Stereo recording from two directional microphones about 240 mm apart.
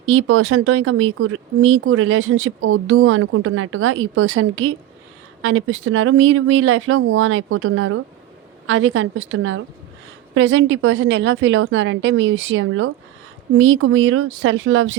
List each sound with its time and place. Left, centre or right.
0.0 s a woman's voice: right